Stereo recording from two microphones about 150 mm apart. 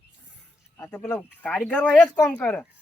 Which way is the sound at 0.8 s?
15° left (ahead or behind).